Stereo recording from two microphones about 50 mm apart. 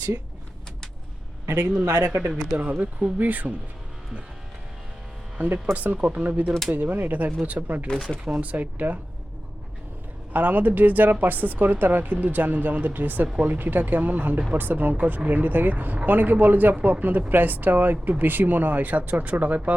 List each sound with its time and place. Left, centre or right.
1.5 s a man's voice: right
2.5 s speech: right
5.7 s speech: right
7.9 s speech: centre
8.2 s speech: right
10.3 s speech: right